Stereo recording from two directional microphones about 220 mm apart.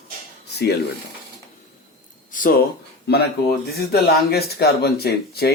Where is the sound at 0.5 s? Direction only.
50° left (ahead or behind).